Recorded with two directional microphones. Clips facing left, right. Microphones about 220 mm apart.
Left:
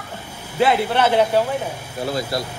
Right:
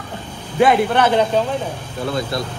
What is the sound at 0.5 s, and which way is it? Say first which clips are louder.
A man's voice: right 3 dB; 10° left (ahead or behind).